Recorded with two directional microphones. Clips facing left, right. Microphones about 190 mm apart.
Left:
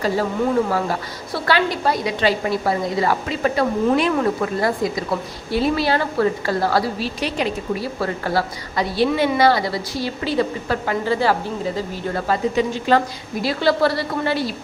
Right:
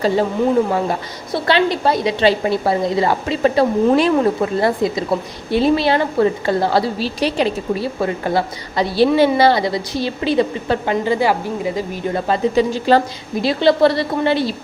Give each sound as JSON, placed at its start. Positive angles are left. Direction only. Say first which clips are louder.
{"t": 0.7, "sound": "a woman's voice", "louder": "right 3 dB", "side_deg": -20}
{"t": 12.5, "sound": "a woman's voice", "louder": "right 5 dB", "side_deg": -30}